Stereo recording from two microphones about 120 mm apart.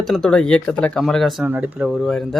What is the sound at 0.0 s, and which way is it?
Speech, 5° left (ahead or behind).